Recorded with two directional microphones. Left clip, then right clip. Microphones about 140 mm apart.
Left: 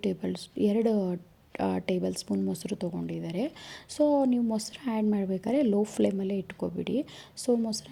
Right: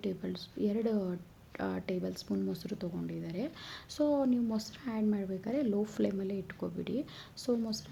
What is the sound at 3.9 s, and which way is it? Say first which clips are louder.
A woman's voice: left 6 dB; 40° left (ahead or behind).